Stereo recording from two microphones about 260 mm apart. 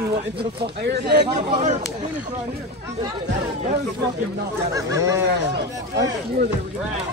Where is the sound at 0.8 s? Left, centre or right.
Right.